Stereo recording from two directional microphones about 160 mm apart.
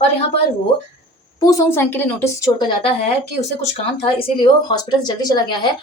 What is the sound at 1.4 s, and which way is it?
A woman's voice, 15° left (ahead or behind).